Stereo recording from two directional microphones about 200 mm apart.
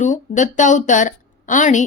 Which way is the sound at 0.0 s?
40° left (ahead or behind).